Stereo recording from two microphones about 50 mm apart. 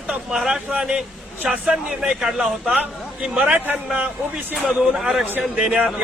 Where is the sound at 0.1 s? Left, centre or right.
Centre.